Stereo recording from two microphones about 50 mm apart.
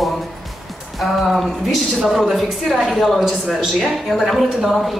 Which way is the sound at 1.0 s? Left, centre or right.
Centre.